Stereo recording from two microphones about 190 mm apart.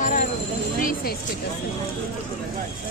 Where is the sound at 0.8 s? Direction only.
45° left (ahead or behind).